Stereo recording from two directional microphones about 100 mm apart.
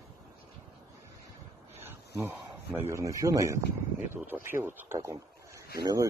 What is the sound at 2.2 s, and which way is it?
Speech, 20° right (ahead or behind).